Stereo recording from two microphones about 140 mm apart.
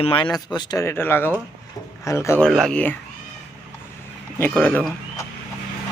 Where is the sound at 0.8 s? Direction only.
15° left (ahead or behind).